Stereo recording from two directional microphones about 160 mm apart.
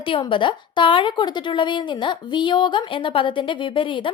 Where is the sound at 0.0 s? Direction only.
35° left (ahead or behind).